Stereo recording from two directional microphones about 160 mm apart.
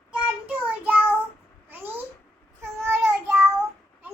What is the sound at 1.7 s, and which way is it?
Cat, 10° right (ahead or behind).